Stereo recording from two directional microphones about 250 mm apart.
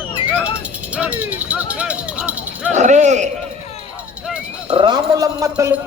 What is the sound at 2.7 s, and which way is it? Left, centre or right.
Speech, right.